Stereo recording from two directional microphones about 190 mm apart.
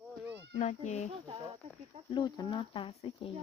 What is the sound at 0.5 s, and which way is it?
Speech, 40° left (ahead or behind).